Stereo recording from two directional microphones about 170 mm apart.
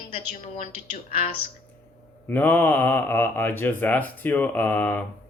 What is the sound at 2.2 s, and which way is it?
Speech, 10° left (ahead or behind).